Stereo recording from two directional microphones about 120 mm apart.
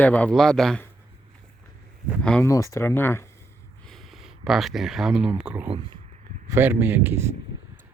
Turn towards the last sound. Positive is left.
turn(degrees=-15)  # may be behind; listen again after turning